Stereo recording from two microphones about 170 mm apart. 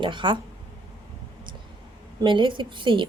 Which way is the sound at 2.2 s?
30° right (ahead or behind).